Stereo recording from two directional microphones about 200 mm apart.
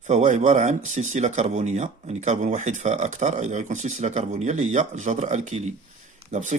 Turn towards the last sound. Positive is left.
turn(degrees=-40)  # may be behind; listen again after turning